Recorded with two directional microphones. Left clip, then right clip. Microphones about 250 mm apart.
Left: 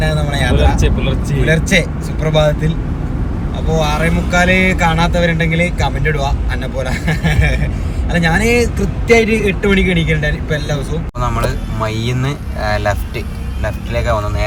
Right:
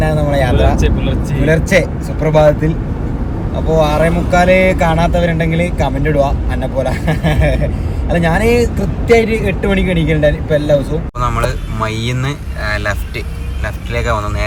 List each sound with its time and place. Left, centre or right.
0.0 s a sound: right
0.8 s speech: centre
1.5 s speech: right
3.8 s speech: right
11.2 s speech: centre